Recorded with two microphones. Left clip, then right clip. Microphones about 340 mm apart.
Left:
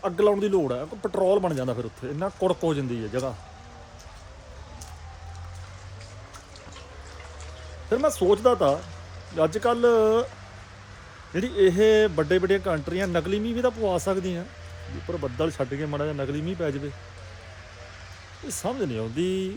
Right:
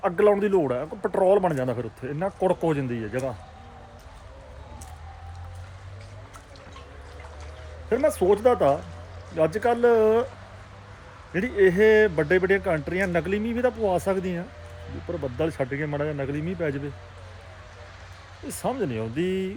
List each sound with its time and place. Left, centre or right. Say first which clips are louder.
0.0 s a man's voice: right 2 dB; centre
7.9 s a man's voice: even; centre
11.3 s a man's voice: right 1 dB; centre
18.6 s a man's voice: right 1 dB; centre